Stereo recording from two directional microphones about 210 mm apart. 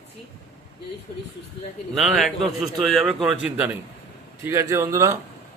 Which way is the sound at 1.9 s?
Centre (ahead or behind).